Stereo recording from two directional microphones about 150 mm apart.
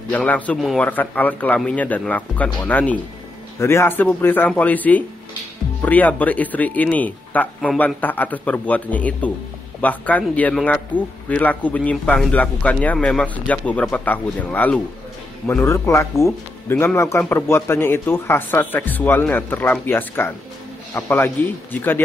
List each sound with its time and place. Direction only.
0.1 s a man's voice: 10° left (ahead or behind)